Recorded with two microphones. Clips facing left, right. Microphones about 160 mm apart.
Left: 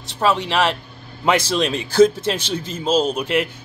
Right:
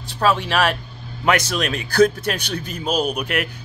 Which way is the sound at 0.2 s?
20° left (ahead or behind).